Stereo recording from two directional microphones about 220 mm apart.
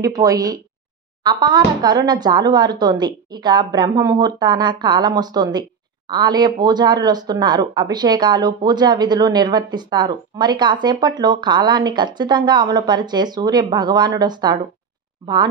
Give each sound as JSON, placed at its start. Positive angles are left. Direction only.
{"t": 0.0, "sound": "speech", "side_deg": -15}